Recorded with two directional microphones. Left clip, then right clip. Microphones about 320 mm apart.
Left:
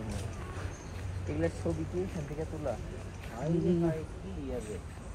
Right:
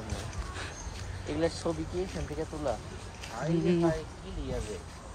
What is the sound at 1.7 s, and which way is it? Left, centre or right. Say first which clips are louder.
Speech: right 3 dB; right.